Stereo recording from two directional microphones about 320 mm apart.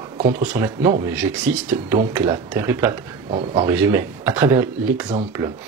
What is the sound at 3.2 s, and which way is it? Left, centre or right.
Speech, centre.